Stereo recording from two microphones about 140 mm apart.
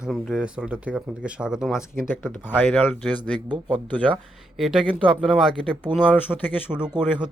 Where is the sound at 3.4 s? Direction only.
35° right (ahead or behind).